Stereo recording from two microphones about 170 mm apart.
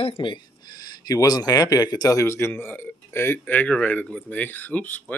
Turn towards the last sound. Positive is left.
turn(degrees=10)  # may be behind; listen again after turning